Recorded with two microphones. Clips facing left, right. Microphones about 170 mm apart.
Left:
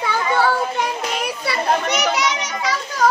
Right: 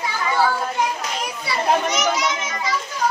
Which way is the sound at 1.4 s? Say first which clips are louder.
Right 1 dB; 65° left (ahead or behind).